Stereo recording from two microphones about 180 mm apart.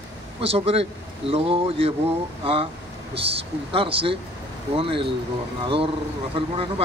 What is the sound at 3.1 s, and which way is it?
Speech, 30° right (ahead or behind).